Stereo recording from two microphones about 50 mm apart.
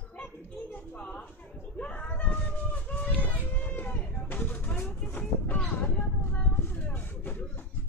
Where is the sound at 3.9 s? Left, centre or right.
Left.